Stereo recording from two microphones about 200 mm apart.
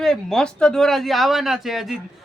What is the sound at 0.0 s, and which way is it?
A man's voice, centre (ahead or behind).